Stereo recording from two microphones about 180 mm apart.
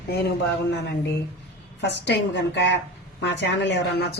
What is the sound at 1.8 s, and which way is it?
A woman's voice, 75° left (ahead or behind).